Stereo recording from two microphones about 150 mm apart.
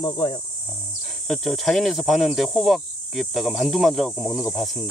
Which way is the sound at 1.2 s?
5° left (ahead or behind).